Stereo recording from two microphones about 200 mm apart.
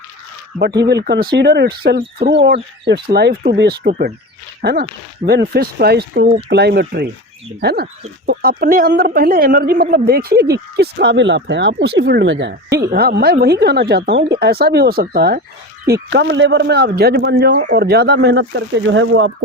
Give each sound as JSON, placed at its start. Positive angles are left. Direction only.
{"t": 0.6, "sound": "a woman's voice", "side_deg": -55}